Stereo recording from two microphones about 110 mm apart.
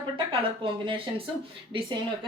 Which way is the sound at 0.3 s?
50° right (ahead or behind).